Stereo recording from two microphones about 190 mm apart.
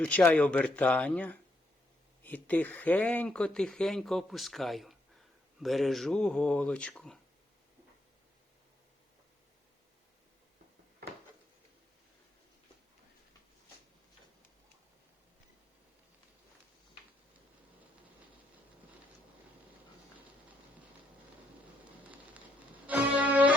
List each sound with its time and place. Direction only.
0.0 s speech: 5° left (ahead or behind)
22.9 s music: 10° right (ahead or behind)